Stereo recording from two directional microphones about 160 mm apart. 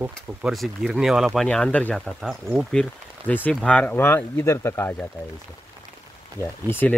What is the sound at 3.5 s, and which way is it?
Speech, 5° left (ahead or behind).